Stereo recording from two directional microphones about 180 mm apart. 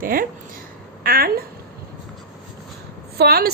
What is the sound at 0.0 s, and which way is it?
A woman's voice, 50° right (ahead or behind).